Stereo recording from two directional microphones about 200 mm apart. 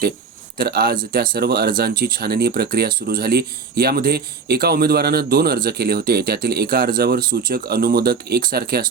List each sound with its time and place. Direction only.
0.6 s speech: 50° right (ahead or behind)